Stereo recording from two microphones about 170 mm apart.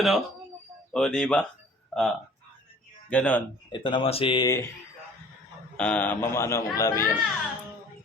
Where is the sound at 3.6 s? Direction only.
30° left (ahead or behind).